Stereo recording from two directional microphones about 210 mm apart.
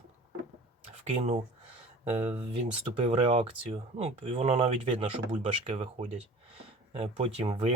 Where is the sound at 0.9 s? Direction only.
30° right (ahead or behind).